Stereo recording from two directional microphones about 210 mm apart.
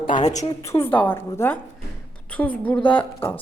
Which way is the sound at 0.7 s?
10° left (ahead or behind).